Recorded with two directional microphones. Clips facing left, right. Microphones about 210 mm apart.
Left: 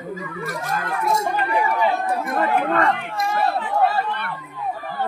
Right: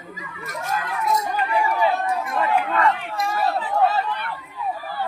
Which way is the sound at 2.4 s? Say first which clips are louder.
Even; 50° left (ahead or behind).